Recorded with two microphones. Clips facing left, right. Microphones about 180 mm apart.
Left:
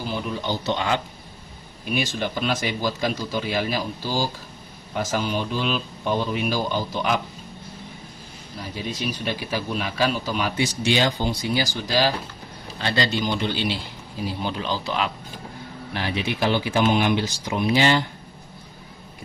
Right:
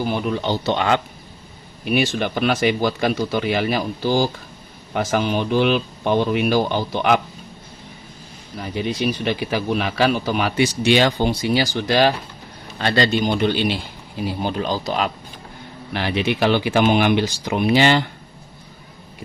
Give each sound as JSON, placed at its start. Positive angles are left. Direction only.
{"t": 0.0, "sound": "speech", "side_deg": -65}
{"t": 8.7, "sound": "speech", "side_deg": -60}
{"t": 16.0, "sound": "speech", "side_deg": -70}